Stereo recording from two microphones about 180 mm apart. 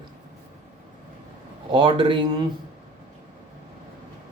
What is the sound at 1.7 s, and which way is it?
Speech, 25° right (ahead or behind).